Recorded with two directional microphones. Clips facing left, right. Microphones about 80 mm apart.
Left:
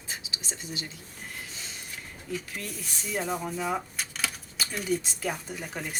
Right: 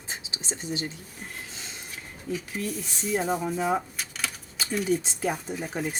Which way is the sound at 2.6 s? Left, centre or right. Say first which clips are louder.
Right 7 dB; right.